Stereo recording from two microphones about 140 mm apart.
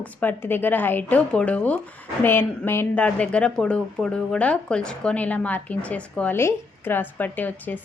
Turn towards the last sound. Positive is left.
turn(degrees=10)  # may be behind; listen again after turning